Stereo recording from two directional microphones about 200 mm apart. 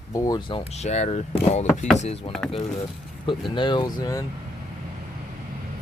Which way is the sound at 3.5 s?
25° left (ahead or behind).